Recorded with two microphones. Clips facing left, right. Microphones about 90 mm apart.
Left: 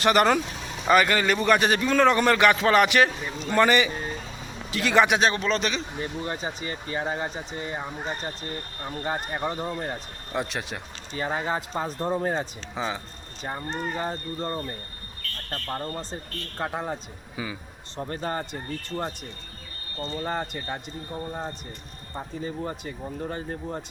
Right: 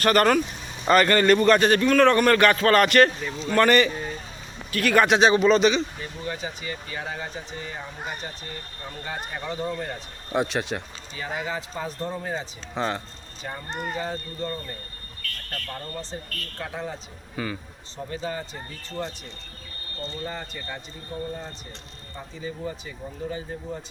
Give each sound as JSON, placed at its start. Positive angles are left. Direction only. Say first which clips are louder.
{"t": 0.0, "sound": "a man's voice", "louder": "right 1 dB", "side_deg": 20}
{"t": 0.9, "sound": "a man's voice", "louder": "right 3 dB", "side_deg": 5}
{"t": 5.0, "sound": "a man's voice", "louder": "right 5 dB", "side_deg": 0}
{"t": 6.2, "sound": "speech", "louder": "left 1 dB", "side_deg": 35}
{"t": 9.0, "sound": "speech", "louder": "left 4 dB", "side_deg": 45}
{"t": 9.6, "sound": "a man's voice", "louder": "right 1 dB", "side_deg": 15}
{"t": 10.3, "sound": "a man's voice", "louder": "right 5 dB", "side_deg": 0}
{"t": 11.1, "sound": "speech", "louder": "left 3 dB", "side_deg": 35}
{"t": 12.7, "sound": "a man's voice", "louder": "right 3 dB", "side_deg": 0}
{"t": 13.9, "sound": "speech", "louder": "left 1 dB", "side_deg": 40}
{"t": 17.3, "sound": "a man's voice", "louder": "right 3 dB", "side_deg": 10}
{"t": 17.9, "sound": "speech", "louder": "left 1 dB", "side_deg": 50}
{"t": 20.2, "sound": "speech", "louder": "left 7 dB", "side_deg": 50}
{"t": 22.4, "sound": "speech", "louder": "even", "side_deg": 50}